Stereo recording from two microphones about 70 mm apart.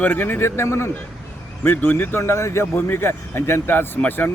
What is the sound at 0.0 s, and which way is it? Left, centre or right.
A man's voice, left.